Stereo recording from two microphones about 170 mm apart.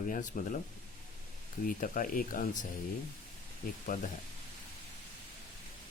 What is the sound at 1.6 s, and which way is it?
Speech, 55° left (ahead or behind).